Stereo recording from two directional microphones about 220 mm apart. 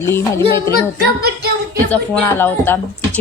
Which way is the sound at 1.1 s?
45° right (ahead or behind).